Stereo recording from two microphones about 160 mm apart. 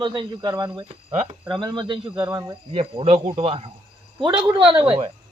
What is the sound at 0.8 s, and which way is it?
Speech, 45° right (ahead or behind).